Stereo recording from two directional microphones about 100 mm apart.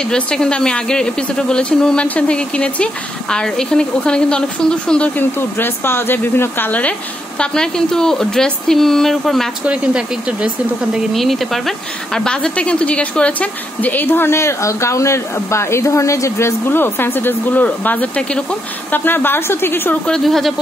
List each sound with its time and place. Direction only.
0.1 s speech: 10° left (ahead or behind)
9.7 s speech: 10° right (ahead or behind)
11.1 s a woman's voice: centre (ahead or behind); by 20.0 s 20° left (ahead or behind)
20.1 s speech: centre (ahead or behind)